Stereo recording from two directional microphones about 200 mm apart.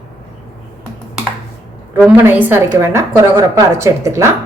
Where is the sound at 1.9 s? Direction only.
10° right (ahead or behind).